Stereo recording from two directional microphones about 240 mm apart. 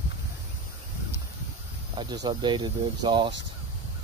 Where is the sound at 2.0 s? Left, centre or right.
Centre.